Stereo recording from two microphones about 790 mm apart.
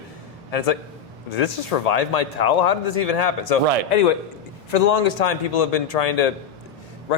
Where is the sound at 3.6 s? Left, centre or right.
Right.